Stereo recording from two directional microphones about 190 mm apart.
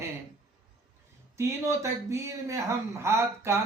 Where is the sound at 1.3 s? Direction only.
15° right (ahead or behind).